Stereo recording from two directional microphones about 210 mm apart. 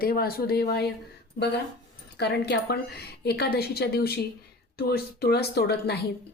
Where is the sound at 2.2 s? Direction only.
50° left (ahead or behind).